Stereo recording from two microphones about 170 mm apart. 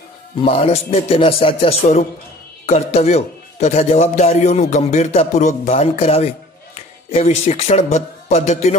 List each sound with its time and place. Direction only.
0.4 s a man's voice: 35° left (ahead or behind)